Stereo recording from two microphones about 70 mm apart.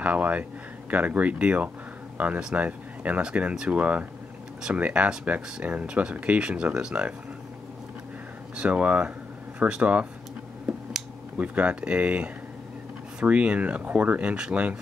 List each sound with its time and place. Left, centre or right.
0.0 s speech: centre
8.5 s speech: centre
11.3 s speech: right